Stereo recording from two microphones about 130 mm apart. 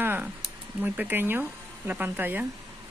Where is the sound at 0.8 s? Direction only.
15° right (ahead or behind).